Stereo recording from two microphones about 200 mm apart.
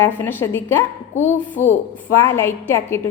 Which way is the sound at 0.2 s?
10° left (ahead or behind).